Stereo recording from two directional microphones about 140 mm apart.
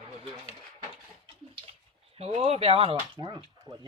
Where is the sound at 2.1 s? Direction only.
50° right (ahead or behind).